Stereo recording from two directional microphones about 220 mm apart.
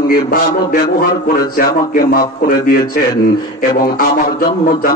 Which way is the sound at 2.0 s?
40° left (ahead or behind).